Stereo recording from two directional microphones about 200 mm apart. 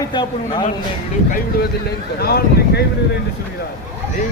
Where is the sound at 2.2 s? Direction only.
50° left (ahead or behind).